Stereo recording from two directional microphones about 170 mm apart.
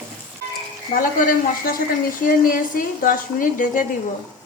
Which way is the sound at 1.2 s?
55° left (ahead or behind).